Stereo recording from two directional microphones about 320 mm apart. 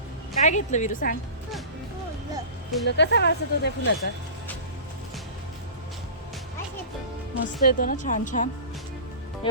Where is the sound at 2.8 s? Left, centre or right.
Left.